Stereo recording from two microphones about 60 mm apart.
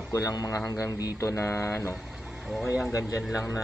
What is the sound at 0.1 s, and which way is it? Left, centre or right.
Speech, left.